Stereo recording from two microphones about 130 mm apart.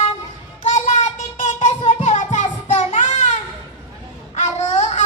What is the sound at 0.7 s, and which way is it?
Child singing, 70° left (ahead or behind).